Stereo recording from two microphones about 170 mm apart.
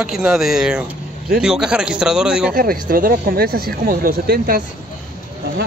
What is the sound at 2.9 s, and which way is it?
Speech, 60° right (ahead or behind).